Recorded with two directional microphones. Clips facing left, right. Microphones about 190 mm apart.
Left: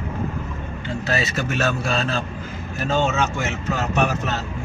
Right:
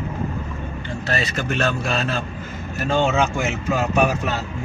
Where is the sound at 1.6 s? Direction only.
5° left (ahead or behind).